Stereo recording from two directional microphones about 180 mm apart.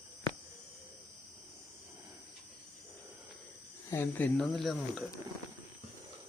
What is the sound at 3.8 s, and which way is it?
Speech, 15° left (ahead or behind).